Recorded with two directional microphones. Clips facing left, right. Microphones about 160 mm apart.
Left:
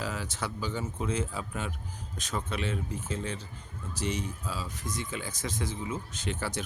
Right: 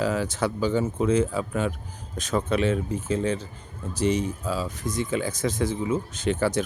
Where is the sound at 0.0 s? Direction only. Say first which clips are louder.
Right 10 dB; 90° right.